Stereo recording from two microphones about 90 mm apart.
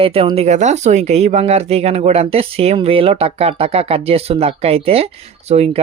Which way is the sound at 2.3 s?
90° right.